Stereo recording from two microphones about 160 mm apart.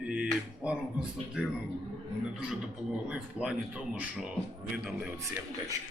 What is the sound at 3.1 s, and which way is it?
A man's voice, 5° right (ahead or behind).